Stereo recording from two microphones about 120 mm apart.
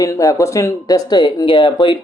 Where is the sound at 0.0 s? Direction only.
30° left (ahead or behind).